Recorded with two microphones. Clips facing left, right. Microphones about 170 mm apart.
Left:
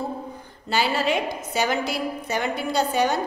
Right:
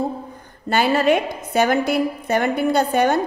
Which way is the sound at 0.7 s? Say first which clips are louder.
Right 6 dB; 55° right (ahead or behind).